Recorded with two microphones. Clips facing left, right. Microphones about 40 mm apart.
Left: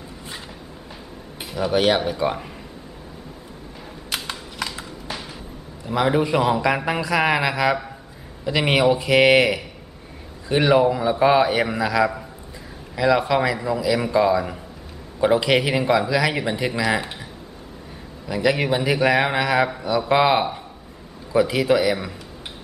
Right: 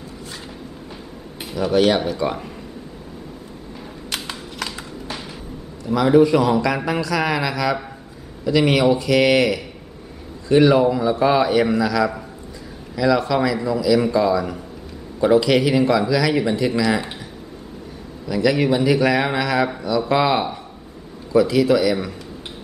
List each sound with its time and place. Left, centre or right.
1.5 s a man's voice: centre
4.1 s typing: centre
5.9 s a man's voice: centre
18.2 s a man's voice: centre